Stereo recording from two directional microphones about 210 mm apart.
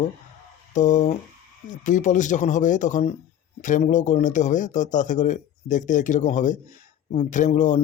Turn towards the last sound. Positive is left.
turn(degrees=35)  # may be behind; listen again after turning